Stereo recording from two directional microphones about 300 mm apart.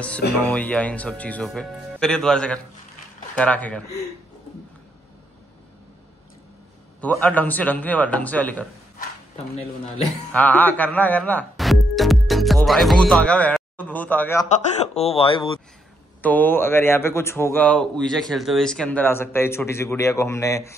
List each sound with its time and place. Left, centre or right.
0.4 s speech: centre
7.0 s speech: centre
9.6 s a man's voice: left
10.3 s speech: centre
15.0 s speech: centre
16.2 s speech: centre